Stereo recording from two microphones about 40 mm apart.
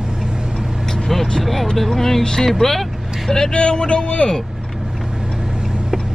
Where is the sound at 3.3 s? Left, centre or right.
Centre.